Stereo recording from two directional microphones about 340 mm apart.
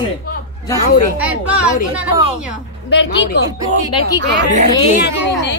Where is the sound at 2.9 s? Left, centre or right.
Left.